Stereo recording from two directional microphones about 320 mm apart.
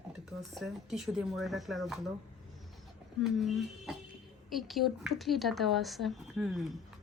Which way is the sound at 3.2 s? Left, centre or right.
Centre.